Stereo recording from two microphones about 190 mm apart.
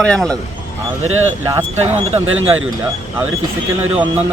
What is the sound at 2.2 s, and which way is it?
Speech, 90° right.